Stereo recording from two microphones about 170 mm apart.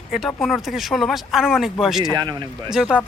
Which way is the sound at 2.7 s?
Centre (ahead or behind).